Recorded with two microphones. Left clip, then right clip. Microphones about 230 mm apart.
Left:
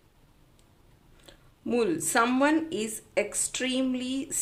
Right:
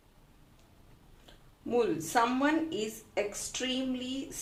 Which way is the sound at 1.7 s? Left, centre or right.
Left.